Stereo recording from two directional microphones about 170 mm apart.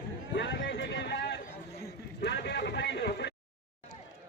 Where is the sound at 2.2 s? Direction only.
90° left.